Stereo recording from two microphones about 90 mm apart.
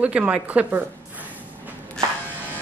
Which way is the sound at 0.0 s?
15° right (ahead or behind).